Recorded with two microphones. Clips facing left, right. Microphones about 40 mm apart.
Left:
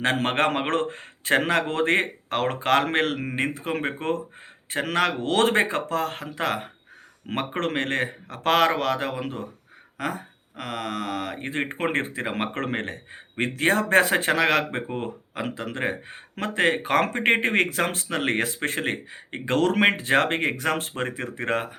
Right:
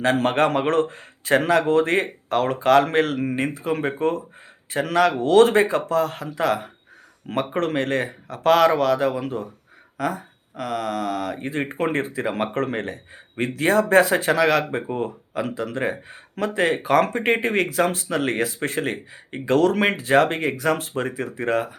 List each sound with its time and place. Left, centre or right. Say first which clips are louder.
0.0 s speech: right 3 dB; left